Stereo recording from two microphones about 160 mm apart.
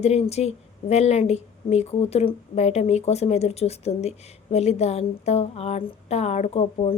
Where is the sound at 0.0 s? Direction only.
40° left (ahead or behind).